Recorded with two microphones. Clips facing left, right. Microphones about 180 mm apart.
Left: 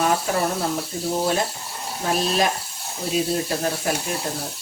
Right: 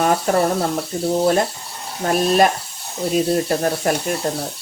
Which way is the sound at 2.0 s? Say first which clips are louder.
Right 6 dB; 50° right (ahead or behind).